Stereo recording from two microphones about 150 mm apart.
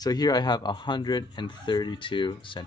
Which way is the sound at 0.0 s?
25° left (ahead or behind).